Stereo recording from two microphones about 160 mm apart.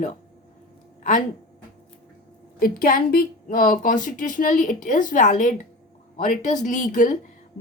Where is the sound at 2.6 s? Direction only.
60° left (ahead or behind).